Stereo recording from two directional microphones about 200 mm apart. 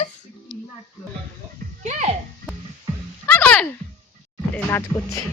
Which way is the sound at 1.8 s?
35° right (ahead or behind).